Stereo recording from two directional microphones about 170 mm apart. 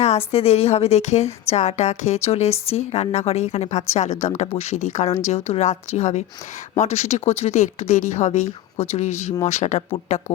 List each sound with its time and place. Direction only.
0.0 s a woman's voice: 35° left (ahead or behind)